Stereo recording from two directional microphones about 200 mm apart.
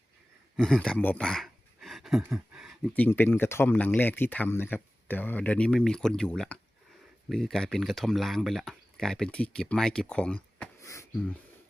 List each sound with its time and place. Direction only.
0.5 s speech: centre (ahead or behind)